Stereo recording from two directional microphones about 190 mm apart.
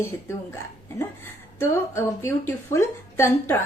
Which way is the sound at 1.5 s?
15° left (ahead or behind).